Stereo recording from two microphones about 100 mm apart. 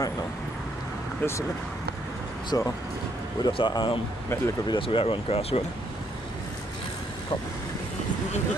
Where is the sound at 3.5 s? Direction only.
50° left (ahead or behind); by 5.6 s 90° left.